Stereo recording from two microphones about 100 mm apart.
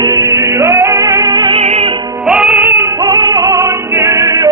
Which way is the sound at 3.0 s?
50° right (ahead or behind).